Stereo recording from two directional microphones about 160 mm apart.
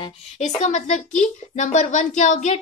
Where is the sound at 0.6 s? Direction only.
45° left (ahead or behind).